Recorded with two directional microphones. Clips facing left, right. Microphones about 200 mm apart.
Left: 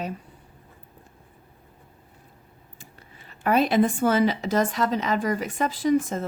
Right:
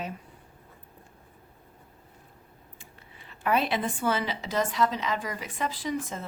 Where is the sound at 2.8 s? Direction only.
40° left (ahead or behind).